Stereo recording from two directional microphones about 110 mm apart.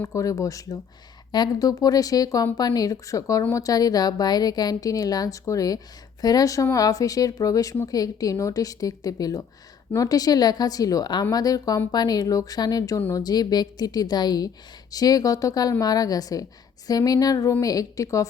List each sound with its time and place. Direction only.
0.0 s a woman's voice: 30° left (ahead or behind)